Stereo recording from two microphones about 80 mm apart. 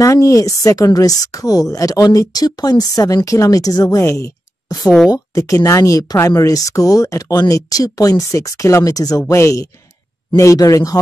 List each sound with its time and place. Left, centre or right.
0.0 s speech: left
2.0 s speech: left
4.8 s speech: centre
5.1 s speech: left